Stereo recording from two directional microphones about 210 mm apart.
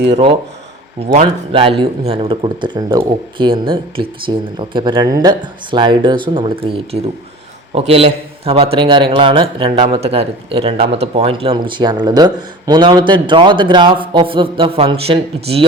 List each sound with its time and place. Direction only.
0.1 s a man's voice: 25° right (ahead or behind)